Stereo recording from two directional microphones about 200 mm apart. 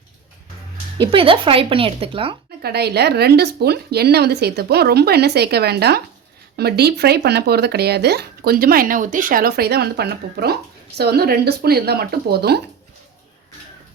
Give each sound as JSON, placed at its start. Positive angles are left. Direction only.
{"t": 0.9, "sound": "speech", "side_deg": -25}
{"t": 2.6, "sound": "speech", "side_deg": -55}